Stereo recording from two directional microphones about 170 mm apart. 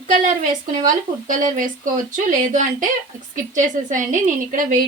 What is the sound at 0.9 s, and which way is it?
Speech, 50° right (ahead or behind).